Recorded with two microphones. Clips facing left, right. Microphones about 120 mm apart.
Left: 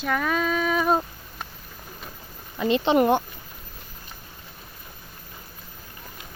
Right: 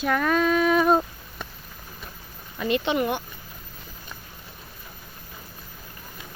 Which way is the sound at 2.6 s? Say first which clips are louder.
Left 3 dB; 20° left (ahead or behind).